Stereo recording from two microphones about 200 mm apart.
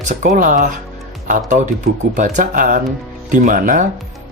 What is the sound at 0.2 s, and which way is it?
Speech, 40° right (ahead or behind).